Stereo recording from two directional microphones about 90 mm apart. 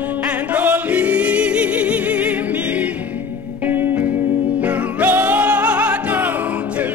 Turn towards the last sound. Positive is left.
turn(degrees=-15)  # may be behind; listen again after turning